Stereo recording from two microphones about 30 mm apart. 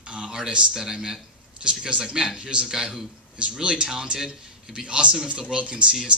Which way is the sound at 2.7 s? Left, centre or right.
Right.